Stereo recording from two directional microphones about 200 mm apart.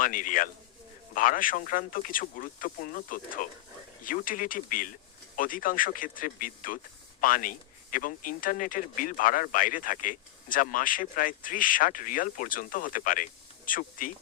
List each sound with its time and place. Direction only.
0.0 s speech: 40° left (ahead or behind)